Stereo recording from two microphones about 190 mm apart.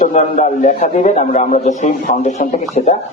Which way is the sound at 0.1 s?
40° left (ahead or behind).